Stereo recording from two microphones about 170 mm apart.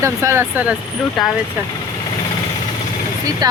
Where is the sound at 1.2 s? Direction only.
Centre (ahead or behind).